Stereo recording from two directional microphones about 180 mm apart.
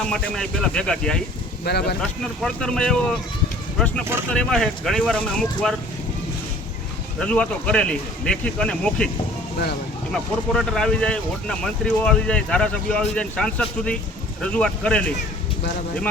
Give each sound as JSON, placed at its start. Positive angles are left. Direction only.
{"t": 0.1, "sound": "speech", "side_deg": 5}
{"t": 1.6, "sound": "speech", "side_deg": 65}
{"t": 2.0, "sound": "speech", "side_deg": 5}
{"t": 7.2, "sound": "speech", "side_deg": 5}
{"t": 10.1, "sound": "speech", "side_deg": 0}